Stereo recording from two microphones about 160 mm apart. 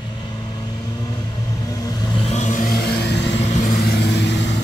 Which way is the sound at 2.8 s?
90° left.